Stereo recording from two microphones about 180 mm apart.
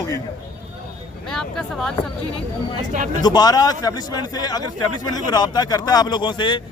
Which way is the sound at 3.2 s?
20° left (ahead or behind).